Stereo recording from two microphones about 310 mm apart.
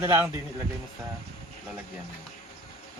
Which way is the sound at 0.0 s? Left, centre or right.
Centre.